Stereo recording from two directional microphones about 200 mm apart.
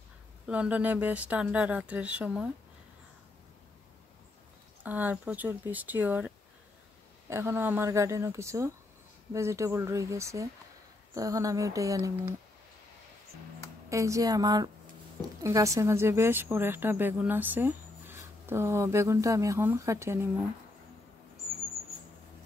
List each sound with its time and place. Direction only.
0.5 s a woman's voice: 5° right (ahead or behind)
4.8 s a woman's voice: 10° right (ahead or behind)
13.8 s a woman's voice: 15° right (ahead or behind)